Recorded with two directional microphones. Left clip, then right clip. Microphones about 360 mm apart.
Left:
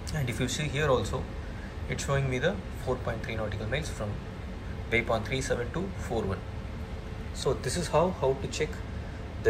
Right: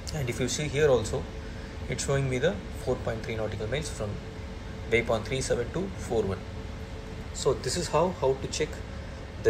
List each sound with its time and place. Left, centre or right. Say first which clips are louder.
0.1 s speech: right 2 dB; centre
4.9 s speech: right 2 dB; centre
6.1 s speech: right 4 dB; centre
7.3 s speech: right 3 dB; centre